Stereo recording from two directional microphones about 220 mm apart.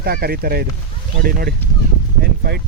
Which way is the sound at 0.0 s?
45° right (ahead or behind).